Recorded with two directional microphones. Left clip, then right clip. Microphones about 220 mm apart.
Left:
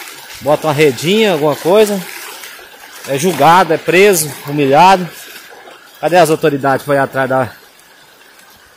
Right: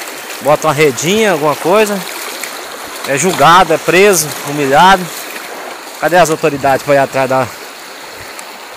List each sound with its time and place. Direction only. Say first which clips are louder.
0.5 s speech: right 1 dB; 15° left (ahead or behind)
3.3 s speech: right 2 dB; 10° left (ahead or behind)
4.2 s speech: right 1 dB; 20° left (ahead or behind)
6.0 s speech: even; 25° left (ahead or behind)